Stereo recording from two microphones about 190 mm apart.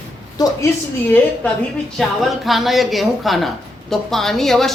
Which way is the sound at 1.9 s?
Centre (ahead or behind).